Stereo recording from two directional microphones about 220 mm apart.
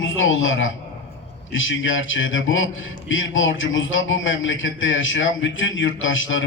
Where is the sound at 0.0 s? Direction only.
60° left (ahead or behind).